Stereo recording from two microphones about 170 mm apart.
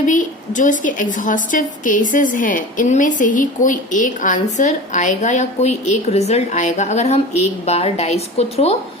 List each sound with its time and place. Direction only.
0.0 s a woman's voice: 45° left (ahead or behind)